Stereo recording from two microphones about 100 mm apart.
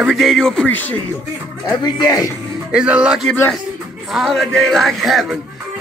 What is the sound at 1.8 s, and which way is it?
Speech, 45° left (ahead or behind).